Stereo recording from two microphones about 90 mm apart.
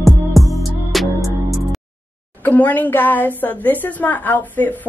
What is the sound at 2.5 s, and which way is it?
A woman's voice, 20° left (ahead or behind).